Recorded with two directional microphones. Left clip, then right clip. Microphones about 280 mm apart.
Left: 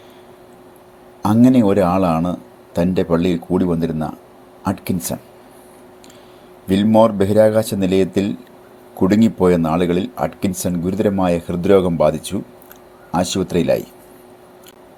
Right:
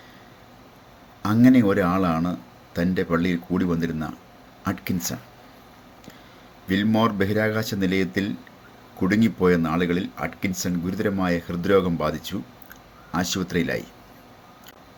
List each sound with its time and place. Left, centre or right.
1.2 s speech: left
6.7 s speech: centre